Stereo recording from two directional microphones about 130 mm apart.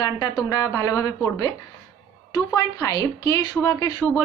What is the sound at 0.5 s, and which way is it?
Speech, 25° left (ahead or behind).